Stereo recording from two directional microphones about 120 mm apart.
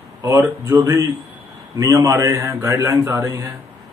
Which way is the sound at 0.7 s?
25° right (ahead or behind).